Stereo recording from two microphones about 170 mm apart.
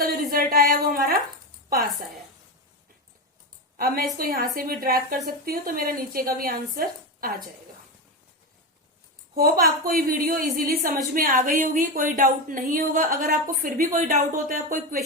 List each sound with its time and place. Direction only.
0.0 s a sound: 60° right (ahead or behind)
3.8 s a woman's voice: 60° right (ahead or behind)
9.3 s a woman's voice: 65° right (ahead or behind)